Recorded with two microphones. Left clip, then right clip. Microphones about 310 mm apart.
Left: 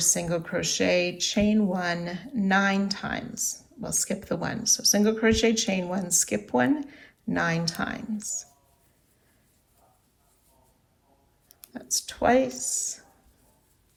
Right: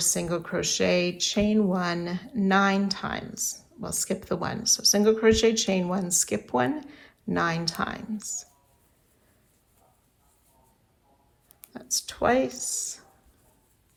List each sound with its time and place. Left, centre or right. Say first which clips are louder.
0.0 s speech: left 1 dB; centre
11.7 s speech: even; centre